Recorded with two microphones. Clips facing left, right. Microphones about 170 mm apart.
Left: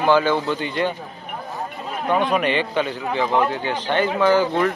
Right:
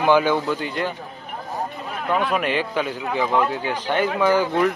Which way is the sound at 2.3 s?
5° right (ahead or behind).